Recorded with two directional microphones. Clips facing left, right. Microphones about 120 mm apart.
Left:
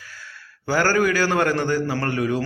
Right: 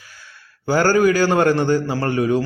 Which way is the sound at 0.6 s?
20° right (ahead or behind).